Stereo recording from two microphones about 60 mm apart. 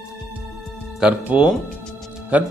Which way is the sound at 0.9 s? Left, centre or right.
Centre.